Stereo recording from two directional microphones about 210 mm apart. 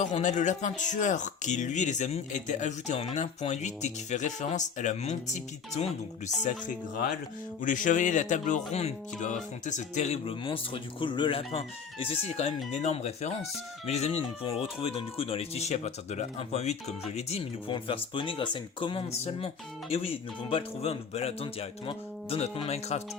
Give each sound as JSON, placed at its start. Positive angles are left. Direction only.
{"t": 0.0, "sound": "speech", "side_deg": 35}
{"t": 20.5, "sound": "speech", "side_deg": 30}